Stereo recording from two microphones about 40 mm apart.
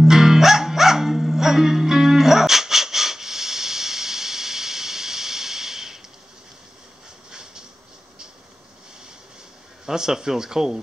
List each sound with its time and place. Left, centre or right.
0.0 s music: centre
7.2 s a sound: centre
9.8 s speech: centre